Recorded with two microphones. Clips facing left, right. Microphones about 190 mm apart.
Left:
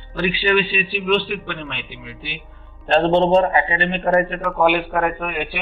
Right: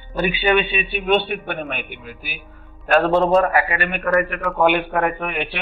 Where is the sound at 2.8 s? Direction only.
25° left (ahead or behind).